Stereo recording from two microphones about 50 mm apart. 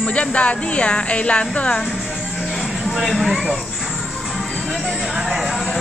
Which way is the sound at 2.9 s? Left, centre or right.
Centre.